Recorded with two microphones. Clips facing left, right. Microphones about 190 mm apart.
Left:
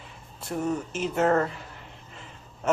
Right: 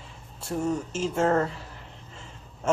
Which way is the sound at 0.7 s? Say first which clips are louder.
Even; 25° right (ahead or behind).